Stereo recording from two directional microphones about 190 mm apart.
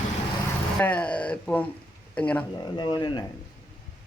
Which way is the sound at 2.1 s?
5° left (ahead or behind).